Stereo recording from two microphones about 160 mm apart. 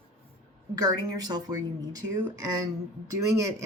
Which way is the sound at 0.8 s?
25° right (ahead or behind).